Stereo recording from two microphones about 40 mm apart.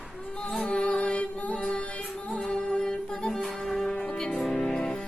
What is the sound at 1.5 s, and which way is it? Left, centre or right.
Music, centre.